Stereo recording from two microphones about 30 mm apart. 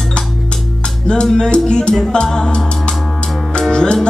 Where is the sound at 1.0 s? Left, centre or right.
Left.